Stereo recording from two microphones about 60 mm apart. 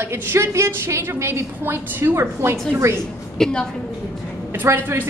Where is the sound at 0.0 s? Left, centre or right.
Right.